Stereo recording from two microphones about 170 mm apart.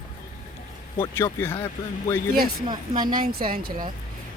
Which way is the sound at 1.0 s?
15° left (ahead or behind).